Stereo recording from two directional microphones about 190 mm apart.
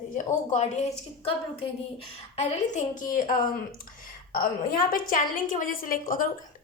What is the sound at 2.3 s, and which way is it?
A woman's voice, 45° left (ahead or behind).